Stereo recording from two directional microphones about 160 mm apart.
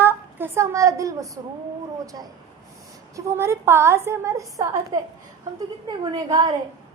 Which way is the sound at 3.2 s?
15° right (ahead or behind).